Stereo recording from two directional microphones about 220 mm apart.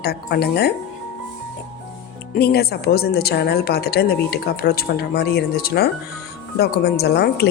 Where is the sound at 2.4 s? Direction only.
45° left (ahead or behind).